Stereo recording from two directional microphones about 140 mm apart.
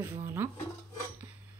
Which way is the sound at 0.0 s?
15° right (ahead or behind).